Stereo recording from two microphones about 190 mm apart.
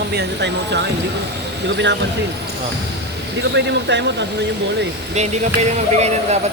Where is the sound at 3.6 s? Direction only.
65° right (ahead or behind).